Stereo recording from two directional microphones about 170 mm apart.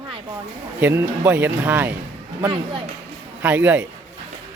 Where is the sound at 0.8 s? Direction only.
10° right (ahead or behind).